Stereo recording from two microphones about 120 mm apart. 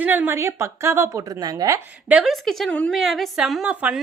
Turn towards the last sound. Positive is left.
turn(degrees=-10)  # may be behind; listen again after turning